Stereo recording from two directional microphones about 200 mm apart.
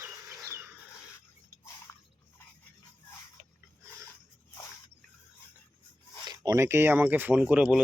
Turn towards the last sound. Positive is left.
turn(degrees=-5)  # may be behind; listen again after turning